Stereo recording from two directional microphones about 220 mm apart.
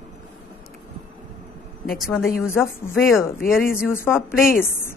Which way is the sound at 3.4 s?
40° left (ahead or behind).